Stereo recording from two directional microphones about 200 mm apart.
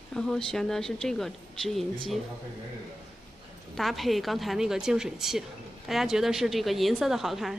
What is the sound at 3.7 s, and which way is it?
A woman's voice, centre (ahead or behind).